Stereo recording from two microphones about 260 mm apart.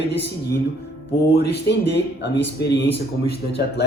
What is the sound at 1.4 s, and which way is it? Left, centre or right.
A man's voice, left.